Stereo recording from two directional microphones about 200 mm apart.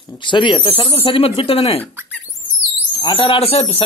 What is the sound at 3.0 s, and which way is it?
Speech, 25° left (ahead or behind).